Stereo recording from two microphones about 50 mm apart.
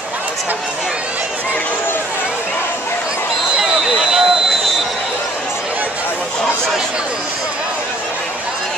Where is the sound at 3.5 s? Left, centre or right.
Centre.